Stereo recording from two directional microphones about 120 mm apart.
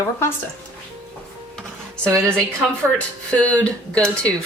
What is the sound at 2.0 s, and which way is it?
Speech, 25° right (ahead or behind).